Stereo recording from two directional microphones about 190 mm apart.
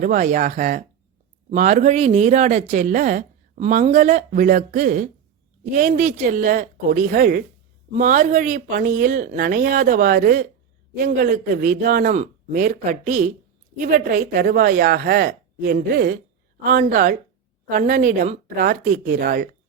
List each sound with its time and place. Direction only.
0.0 s speech: 45° right (ahead or behind)